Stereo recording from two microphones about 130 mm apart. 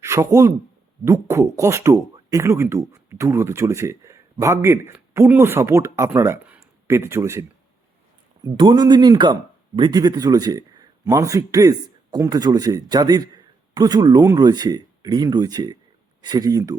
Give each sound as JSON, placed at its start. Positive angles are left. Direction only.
{"t": 0.0, "sound": "a man's voice", "side_deg": -25}
{"t": 8.4, "sound": "a man's voice", "side_deg": -35}